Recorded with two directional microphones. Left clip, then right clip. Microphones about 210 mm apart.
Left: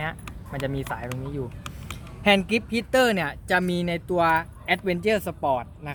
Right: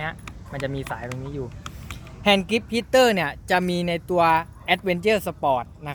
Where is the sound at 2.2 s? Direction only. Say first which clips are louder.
Right 1 dB; 10° right (ahead or behind).